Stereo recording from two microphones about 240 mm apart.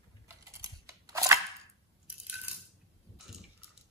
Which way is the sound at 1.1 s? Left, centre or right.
Centre.